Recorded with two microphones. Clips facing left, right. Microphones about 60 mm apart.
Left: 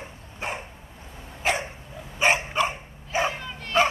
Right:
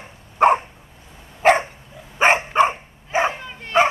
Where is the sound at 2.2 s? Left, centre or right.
Right.